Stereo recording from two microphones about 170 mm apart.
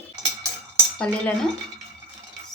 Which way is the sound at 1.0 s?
5° left (ahead or behind).